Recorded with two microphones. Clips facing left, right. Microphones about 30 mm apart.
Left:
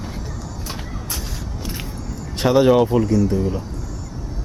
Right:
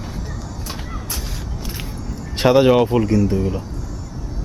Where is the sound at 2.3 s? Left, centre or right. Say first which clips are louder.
Right 1 dB; right.